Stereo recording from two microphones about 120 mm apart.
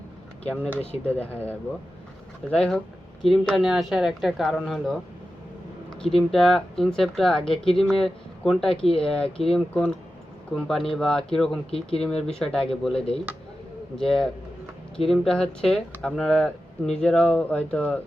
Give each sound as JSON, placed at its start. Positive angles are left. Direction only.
{"t": 0.4, "sound": "speech", "side_deg": 10}
{"t": 6.0, "sound": "speech", "side_deg": 5}
{"t": 11.7, "sound": "speech", "side_deg": 55}
{"t": 12.0, "sound": "speech", "side_deg": 5}